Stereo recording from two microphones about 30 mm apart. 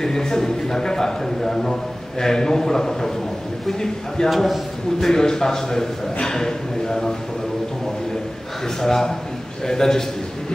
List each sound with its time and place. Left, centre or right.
0.0 s a man's voice: centre
4.2 s a man's voice: left
8.8 s a man's voice: centre